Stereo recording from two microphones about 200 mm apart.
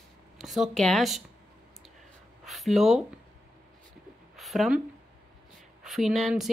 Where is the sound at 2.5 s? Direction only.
Centre (ahead or behind).